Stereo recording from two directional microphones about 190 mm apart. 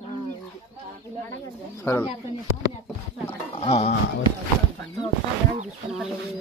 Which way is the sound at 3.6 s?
30° left (ahead or behind).